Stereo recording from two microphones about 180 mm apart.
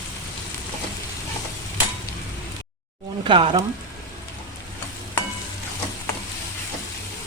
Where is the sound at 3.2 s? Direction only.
25° right (ahead or behind).